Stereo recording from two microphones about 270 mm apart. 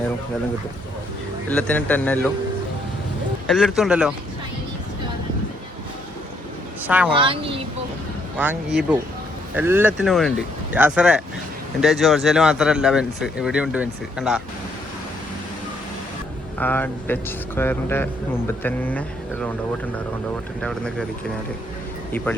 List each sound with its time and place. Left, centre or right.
1.5 s speech: centre
3.4 s speech: centre
6.8 s speech: centre
7.2 s speech: centre
8.4 s speech: centre
16.6 s a man's voice: centre
20.6 s speech: centre